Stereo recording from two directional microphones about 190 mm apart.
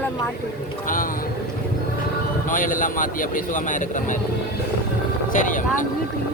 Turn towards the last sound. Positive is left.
turn(degrees=45)  # may be behind; listen again after turning